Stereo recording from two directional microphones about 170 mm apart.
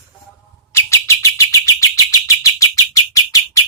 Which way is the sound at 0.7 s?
15° left (ahead or behind).